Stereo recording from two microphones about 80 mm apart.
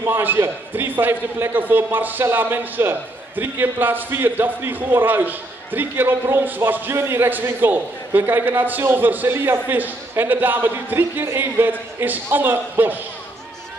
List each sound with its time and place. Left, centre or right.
0.0 s a man's voice: right